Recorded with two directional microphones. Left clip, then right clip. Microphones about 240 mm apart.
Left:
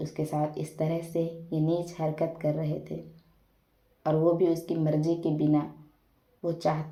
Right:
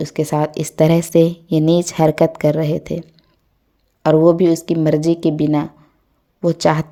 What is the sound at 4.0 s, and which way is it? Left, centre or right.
A woman's voice, right.